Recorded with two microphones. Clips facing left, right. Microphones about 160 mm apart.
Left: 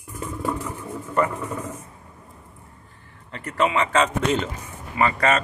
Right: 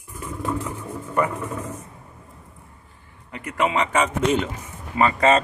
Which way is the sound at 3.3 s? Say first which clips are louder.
Even; 15° right (ahead or behind).